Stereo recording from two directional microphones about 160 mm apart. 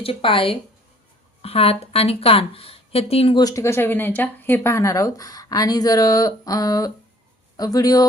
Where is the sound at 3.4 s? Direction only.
20° left (ahead or behind).